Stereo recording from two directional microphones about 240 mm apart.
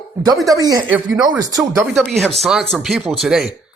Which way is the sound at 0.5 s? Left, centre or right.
Centre.